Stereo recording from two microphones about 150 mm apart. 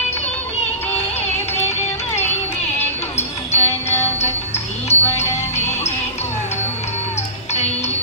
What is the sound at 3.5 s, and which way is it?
Music, 15° left (ahead or behind).